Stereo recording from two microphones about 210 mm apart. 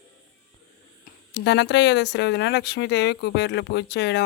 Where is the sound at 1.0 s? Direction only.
55° left (ahead or behind).